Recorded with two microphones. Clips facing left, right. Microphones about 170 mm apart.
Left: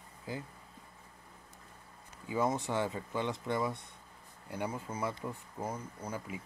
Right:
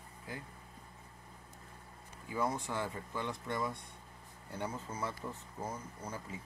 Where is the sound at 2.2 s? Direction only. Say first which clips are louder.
Left 4 dB; 20° left (ahead or behind).